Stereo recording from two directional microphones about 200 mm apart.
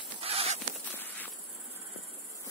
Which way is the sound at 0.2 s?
30° right (ahead or behind).